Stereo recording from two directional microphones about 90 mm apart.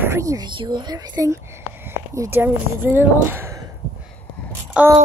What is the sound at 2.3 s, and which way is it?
Speech, 25° right (ahead or behind).